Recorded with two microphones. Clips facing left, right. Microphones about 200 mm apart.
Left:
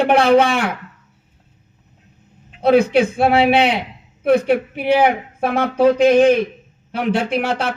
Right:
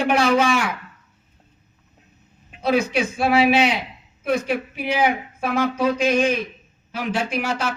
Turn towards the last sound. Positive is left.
turn(degrees=60)  # may be behind; listen again after turning